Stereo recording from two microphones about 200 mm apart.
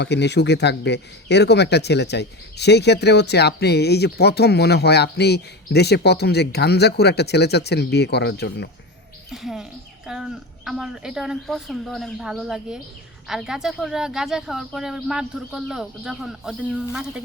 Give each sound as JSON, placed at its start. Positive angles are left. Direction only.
{"t": 0.0, "sound": "speech", "side_deg": 60}
{"t": 9.3, "sound": "speech", "side_deg": 0}